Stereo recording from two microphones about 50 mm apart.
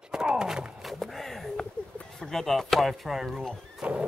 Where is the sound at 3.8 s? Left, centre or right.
Right.